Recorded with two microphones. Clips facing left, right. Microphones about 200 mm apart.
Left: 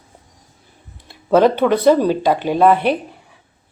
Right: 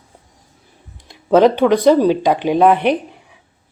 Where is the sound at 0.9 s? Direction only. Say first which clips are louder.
Right 1 dB; 15° right (ahead or behind).